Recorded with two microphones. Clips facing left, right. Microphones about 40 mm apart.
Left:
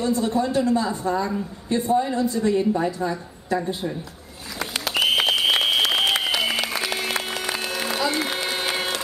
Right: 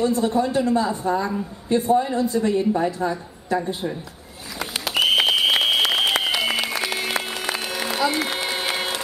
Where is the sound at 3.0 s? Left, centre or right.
Right.